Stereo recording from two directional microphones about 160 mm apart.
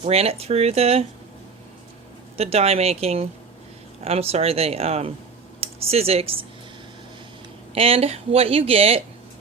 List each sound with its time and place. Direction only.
0.0 s speech: 40° right (ahead or behind)
2.4 s speech: 40° right (ahead or behind)
7.7 s speech: 35° right (ahead or behind)